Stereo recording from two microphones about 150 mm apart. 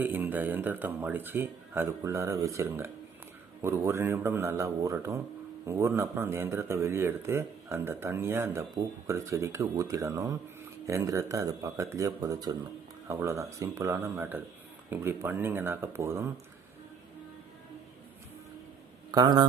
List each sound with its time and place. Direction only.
0.0 s speech: 10° right (ahead or behind)
19.1 s speech: 30° right (ahead or behind)